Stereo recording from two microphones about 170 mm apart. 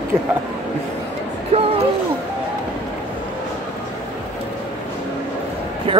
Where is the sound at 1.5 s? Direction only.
35° right (ahead or behind).